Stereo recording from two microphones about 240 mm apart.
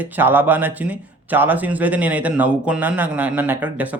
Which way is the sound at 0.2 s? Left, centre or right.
Centre.